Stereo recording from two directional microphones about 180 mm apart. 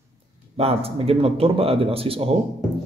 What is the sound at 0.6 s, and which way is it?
A man's voice, 35° right (ahead or behind).